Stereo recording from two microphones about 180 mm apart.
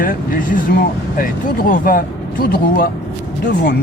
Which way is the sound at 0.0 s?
50° left (ahead or behind).